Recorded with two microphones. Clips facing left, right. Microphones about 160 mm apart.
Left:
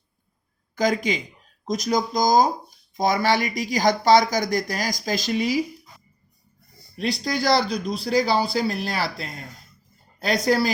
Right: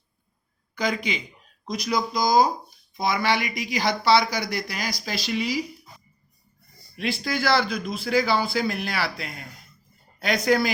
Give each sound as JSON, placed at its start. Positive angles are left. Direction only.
{"t": 0.8, "sound": "speech", "side_deg": 40}
{"t": 6.9, "sound": "speech", "side_deg": 40}